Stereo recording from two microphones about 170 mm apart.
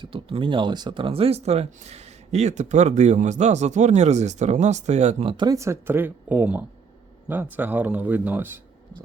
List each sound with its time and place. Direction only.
0.0 s speech: 30° right (ahead or behind)
5.4 s speech: 20° right (ahead or behind)